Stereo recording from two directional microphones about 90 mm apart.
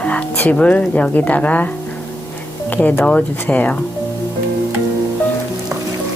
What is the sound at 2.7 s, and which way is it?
A woman's voice, 20° left (ahead or behind).